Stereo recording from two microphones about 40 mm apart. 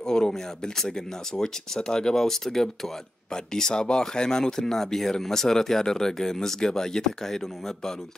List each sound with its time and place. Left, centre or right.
0.0 s speech: centre